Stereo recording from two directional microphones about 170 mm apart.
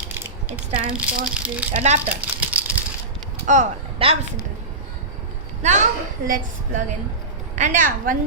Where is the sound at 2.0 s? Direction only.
10° right (ahead or behind).